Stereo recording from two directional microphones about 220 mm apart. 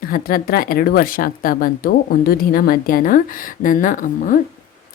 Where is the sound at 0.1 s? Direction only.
40° left (ahead or behind).